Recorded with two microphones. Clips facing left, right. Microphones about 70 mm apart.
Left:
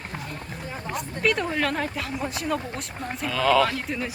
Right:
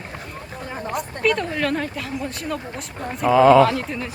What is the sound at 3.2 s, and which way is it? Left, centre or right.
Speech, right.